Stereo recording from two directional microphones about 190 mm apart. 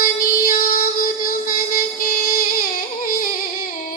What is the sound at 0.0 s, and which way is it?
Music, 50° left (ahead or behind).